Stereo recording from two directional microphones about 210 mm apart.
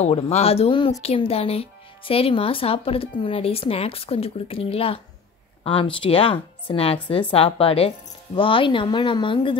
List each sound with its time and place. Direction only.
0.0 s speech: 30° left (ahead or behind)